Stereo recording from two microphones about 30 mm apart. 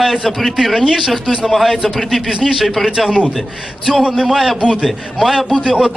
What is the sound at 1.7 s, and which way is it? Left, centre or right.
Speech, centre.